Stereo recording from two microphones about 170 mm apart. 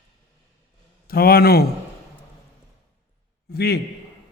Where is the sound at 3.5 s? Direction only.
70° left (ahead or behind).